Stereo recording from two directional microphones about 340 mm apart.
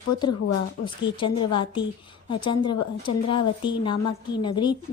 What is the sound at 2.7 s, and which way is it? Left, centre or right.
Speech, left.